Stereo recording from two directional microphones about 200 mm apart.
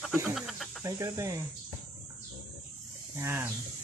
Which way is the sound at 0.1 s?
5° right (ahead or behind).